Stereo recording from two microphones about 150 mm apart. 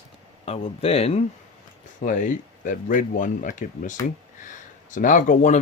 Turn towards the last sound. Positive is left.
turn(degrees=55)  # may be behind; listen again after turning